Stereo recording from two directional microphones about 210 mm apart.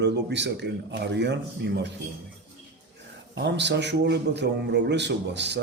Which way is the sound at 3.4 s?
55° right (ahead or behind).